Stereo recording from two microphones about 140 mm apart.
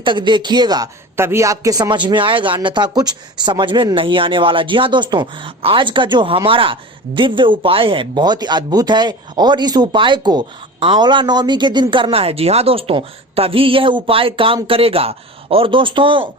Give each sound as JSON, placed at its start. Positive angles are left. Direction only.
{"t": 0.0, "sound": "speech", "side_deg": -35}
{"t": 1.1, "sound": "speech", "side_deg": -15}